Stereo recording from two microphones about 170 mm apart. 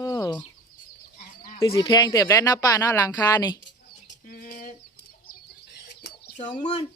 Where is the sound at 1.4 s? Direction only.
30° left (ahead or behind).